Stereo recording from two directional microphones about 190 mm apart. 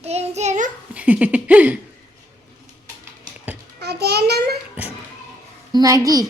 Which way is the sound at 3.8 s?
60° right (ahead or behind).